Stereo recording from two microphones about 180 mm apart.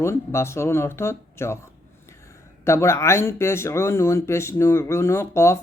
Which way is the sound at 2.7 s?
15° left (ahead or behind).